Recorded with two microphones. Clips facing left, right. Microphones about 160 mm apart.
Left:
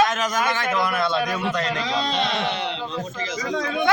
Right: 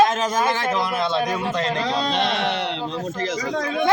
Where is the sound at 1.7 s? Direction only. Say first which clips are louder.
Right 2 dB; 50° right (ahead or behind).